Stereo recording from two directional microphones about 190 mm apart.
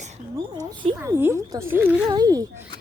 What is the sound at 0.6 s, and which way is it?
Speech, 20° right (ahead or behind).